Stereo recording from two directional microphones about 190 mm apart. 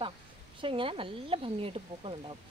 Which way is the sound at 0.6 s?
25° right (ahead or behind).